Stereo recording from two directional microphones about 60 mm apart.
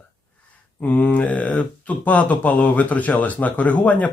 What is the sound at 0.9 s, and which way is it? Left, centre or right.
Speech, left.